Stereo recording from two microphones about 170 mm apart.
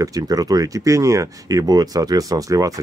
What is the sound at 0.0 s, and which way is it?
Speech, 20° right (ahead or behind).